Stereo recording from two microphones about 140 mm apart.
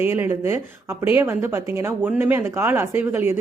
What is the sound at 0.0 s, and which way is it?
Speech, 15° right (ahead or behind).